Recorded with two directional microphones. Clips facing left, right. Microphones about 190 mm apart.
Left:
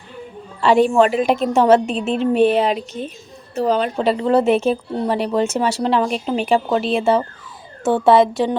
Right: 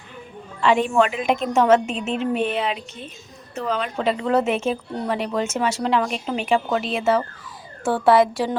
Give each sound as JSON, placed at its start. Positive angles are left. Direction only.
{"t": 0.6, "sound": "a woman's voice", "side_deg": 35}